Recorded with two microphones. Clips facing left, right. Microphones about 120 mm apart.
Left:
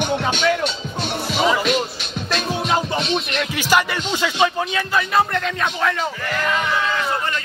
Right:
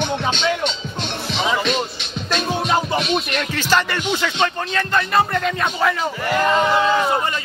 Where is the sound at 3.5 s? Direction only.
10° left (ahead or behind).